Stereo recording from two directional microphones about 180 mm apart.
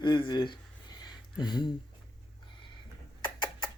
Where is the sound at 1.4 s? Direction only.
25° left (ahead or behind).